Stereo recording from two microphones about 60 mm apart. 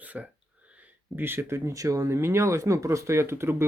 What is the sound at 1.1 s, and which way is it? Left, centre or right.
Speech, right.